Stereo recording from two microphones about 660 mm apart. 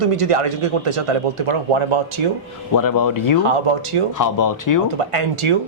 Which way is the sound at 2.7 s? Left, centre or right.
Left.